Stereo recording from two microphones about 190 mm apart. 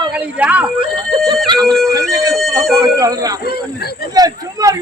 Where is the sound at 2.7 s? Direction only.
20° right (ahead or behind).